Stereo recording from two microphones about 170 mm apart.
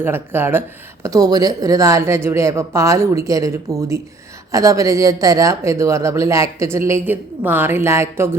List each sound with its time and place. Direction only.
0.0 s speech: 15° right (ahead or behind)